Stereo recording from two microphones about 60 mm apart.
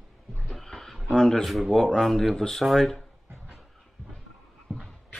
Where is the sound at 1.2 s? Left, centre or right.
Centre.